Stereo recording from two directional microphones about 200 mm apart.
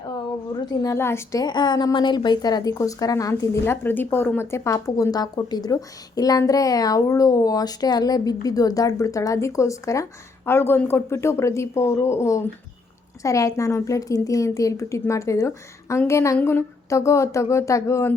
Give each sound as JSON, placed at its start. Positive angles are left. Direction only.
{"t": 0.6, "sound": "a woman's voice", "side_deg": 20}